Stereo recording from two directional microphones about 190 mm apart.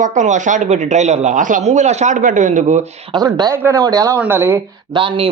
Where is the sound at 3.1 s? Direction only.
20° right (ahead or behind).